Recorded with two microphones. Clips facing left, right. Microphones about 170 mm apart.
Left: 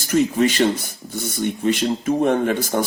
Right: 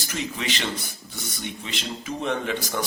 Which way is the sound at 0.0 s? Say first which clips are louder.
Left 13 dB; 45° left (ahead or behind).